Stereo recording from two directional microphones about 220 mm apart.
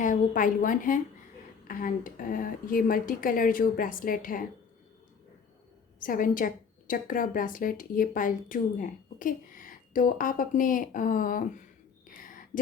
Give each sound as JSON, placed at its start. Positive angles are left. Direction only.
{"t": 0.0, "sound": "a woman's voice", "side_deg": 35}
{"t": 6.0, "sound": "a woman's voice", "side_deg": 40}